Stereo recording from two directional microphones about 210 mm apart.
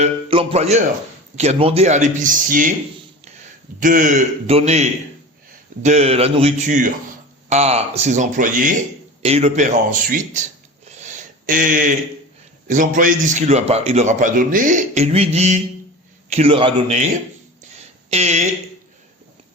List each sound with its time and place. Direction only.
0.0 s a man's voice: 30° right (ahead or behind)
3.8 s a man's voice: 40° right (ahead or behind)
18.1 s a man's voice: 30° right (ahead or behind)